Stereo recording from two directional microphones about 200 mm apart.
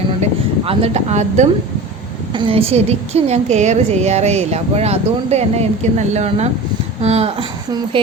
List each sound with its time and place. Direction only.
0.2 s a woman's voice: 30° right (ahead or behind)